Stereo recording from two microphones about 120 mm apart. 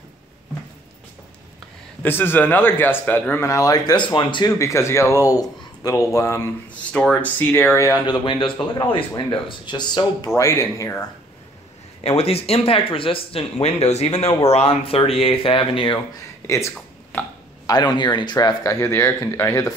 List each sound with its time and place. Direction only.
2.0 s speech: 15° left (ahead or behind); by 4.5 s 40° left (ahead or behind)
4.5 s speech: 25° left (ahead or behind)
6.9 s speech: 10° left (ahead or behind); by 8.0 s 25° left (ahead or behind)
8.1 s speech: 40° left (ahead or behind)
10.3 s speech: 20° left (ahead or behind)
12.0 s speech: 55° left (ahead or behind)
16.4 s speech: 25° left (ahead or behind)
17.6 s speech: 35° left (ahead or behind)